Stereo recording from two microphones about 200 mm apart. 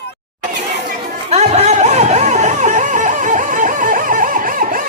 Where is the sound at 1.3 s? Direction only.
35° right (ahead or behind).